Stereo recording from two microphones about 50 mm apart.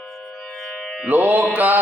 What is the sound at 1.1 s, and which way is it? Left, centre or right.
Speech, right.